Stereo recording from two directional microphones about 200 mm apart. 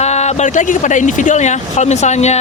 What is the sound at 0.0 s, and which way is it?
Speech, 35° left (ahead or behind).